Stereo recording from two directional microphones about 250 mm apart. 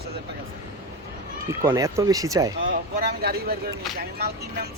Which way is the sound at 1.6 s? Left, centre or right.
Centre.